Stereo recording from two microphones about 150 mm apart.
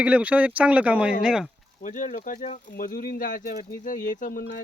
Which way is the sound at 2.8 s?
70° left (ahead or behind).